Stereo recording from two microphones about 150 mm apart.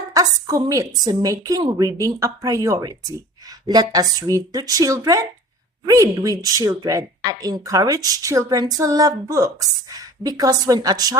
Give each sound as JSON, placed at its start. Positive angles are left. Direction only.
{"t": 0.1, "sound": "a woman's voice", "side_deg": -20}